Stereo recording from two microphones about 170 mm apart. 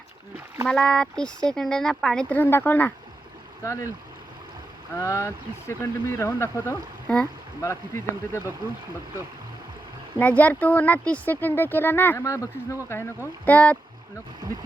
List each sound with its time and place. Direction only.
0.3 s splash: 15° right (ahead or behind)
0.7 s speech: 5° left (ahead or behind)
4.9 s speech: 15° left (ahead or behind)
7.1 s speech: 5° left (ahead or behind)
7.6 s speech: 15° left (ahead or behind)
10.2 s speech: 10° left (ahead or behind)